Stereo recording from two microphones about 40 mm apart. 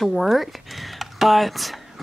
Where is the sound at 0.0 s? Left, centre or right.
Centre.